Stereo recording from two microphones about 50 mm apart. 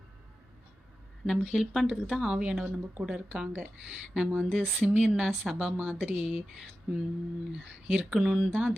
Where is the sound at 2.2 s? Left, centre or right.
Centre.